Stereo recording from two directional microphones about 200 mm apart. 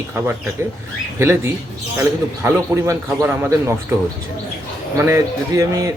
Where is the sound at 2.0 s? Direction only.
15° right (ahead or behind).